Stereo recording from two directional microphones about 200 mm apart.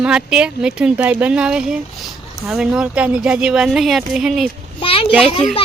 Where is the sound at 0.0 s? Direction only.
5° right (ahead or behind).